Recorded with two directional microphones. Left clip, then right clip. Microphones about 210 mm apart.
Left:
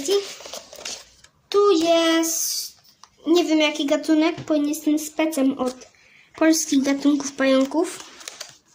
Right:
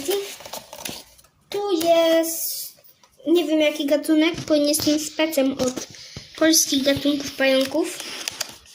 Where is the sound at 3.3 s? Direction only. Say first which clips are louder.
Even; 35° left (ahead or behind).